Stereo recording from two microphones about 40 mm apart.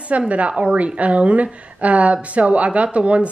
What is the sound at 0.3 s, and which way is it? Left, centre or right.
Speech, right.